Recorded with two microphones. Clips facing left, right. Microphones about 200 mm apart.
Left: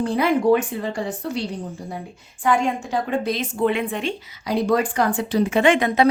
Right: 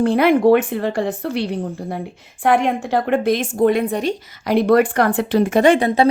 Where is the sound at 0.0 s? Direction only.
60° right (ahead or behind); by 4.1 s 40° right (ahead or behind).